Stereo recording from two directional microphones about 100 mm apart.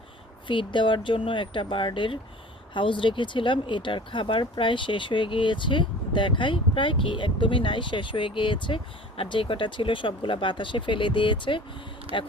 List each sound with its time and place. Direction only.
0.4 s speech: 55° left (ahead or behind)
12.1 s speech: 65° right (ahead or behind)